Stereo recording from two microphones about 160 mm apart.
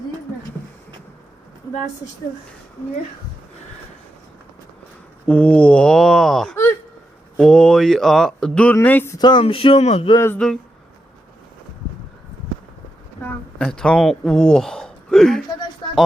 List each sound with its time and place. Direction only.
5.2 s speech: 10° left (ahead or behind)
9.1 s speech: 30° left (ahead or behind)
10.2 s speech: 15° left (ahead or behind)
13.2 s a woman's voice: 5° left (ahead or behind)